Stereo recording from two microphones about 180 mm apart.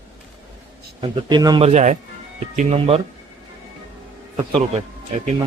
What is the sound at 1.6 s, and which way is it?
Speech, 40° right (ahead or behind).